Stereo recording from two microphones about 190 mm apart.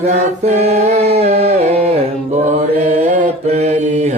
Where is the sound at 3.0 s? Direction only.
35° right (ahead or behind).